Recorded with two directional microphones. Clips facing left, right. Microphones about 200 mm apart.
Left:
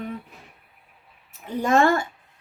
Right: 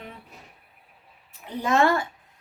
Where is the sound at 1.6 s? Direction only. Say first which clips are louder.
Left 2 dB; 50° left (ahead or behind).